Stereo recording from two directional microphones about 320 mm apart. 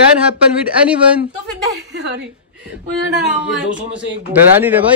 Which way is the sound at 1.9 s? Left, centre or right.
Right.